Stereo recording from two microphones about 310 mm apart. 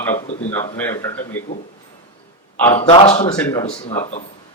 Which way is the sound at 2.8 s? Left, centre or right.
Centre.